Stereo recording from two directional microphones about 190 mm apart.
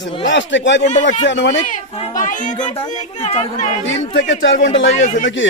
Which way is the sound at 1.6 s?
40° left (ahead or behind).